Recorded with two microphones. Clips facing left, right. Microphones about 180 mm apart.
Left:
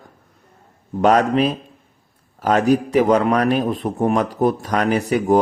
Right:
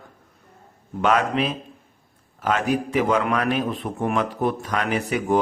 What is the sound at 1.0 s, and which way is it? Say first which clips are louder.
A man's voice: left 6 dB; 40° left (ahead or behind).